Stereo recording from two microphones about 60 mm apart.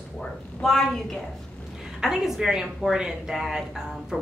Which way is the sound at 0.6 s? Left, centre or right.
Centre.